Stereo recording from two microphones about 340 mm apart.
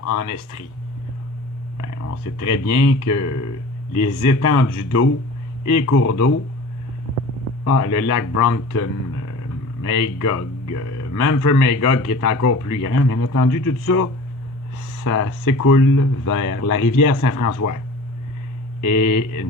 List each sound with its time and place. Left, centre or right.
0.0 s speech: left
1.8 s speech: left
7.6 s speech: left